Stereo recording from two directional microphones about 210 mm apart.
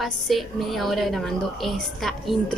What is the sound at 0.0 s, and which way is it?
A woman's voice, centre (ahead or behind).